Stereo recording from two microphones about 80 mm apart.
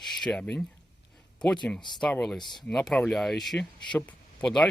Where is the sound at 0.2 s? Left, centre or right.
Centre.